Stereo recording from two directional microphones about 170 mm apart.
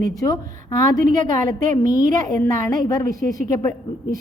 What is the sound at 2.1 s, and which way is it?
A woman's voice, 20° left (ahead or behind).